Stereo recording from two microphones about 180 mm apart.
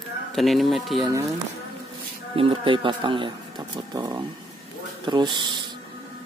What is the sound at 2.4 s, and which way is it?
Speech, 30° right (ahead or behind).